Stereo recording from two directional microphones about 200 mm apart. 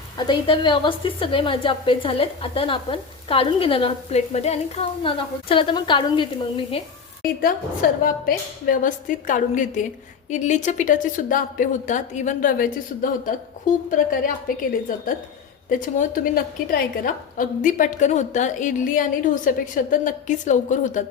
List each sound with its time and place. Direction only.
0.3 s a woman's voice: 25° left (ahead or behind)
7.4 s a woman's voice: 45° left (ahead or behind)